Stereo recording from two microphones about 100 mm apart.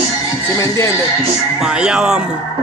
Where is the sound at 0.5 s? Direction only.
30° left (ahead or behind).